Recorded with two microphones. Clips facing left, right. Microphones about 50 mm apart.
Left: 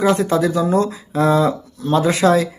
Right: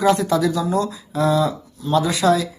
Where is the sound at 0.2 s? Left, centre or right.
Left.